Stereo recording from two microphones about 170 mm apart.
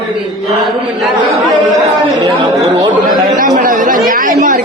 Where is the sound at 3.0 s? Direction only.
55° right (ahead or behind).